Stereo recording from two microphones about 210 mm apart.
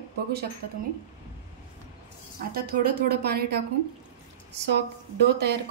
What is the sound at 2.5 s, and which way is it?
A woman's voice, 45° right (ahead or behind).